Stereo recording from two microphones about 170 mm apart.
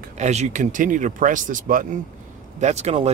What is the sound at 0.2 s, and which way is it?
Speech, 40° right (ahead or behind).